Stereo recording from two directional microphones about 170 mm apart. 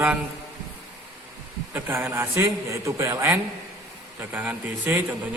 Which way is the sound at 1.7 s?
15° right (ahead or behind).